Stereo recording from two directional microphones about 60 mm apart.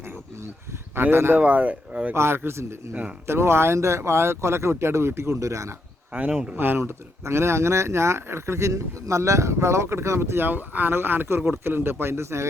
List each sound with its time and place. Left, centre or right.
0.9 s speech: right
1.4 s speech: right
2.1 s speech: right
6.1 s speech: right
6.6 s speech: right